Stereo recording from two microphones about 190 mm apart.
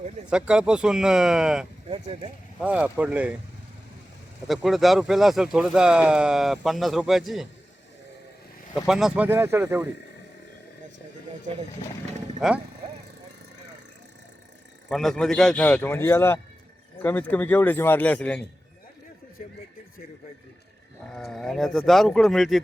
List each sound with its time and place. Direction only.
0.3 s speech: 5° right (ahead or behind)
1.9 s speech: 30° right (ahead or behind)
2.6 s speech: 5° right (ahead or behind)
4.4 s speech: centre (ahead or behind)
8.7 s speech: centre (ahead or behind)
12.4 s speech: centre (ahead or behind)
14.8 s speech: centre (ahead or behind)
21.2 s speech: centre (ahead or behind)